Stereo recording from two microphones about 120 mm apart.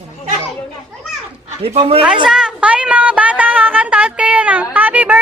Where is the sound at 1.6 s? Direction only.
55° right (ahead or behind).